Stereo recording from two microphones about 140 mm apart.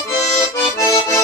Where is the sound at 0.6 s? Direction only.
20° left (ahead or behind).